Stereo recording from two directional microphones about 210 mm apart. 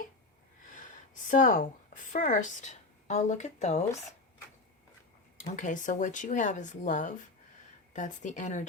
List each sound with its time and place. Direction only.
0.7 s speech: 40° left (ahead or behind)
5.4 s speech: 35° left (ahead or behind)